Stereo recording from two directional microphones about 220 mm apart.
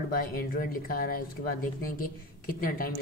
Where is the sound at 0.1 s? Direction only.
40° left (ahead or behind).